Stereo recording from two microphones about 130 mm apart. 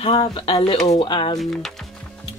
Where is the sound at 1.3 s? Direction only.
Centre (ahead or behind).